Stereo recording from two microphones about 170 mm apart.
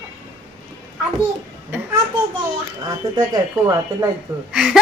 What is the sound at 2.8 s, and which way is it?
Speech, 20° right (ahead or behind).